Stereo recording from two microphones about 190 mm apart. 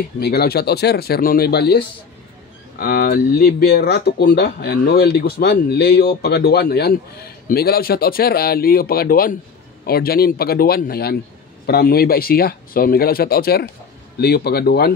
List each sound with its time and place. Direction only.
0.2 s speech: 55° left (ahead or behind)